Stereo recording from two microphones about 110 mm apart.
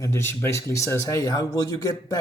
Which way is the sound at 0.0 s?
25° left (ahead or behind).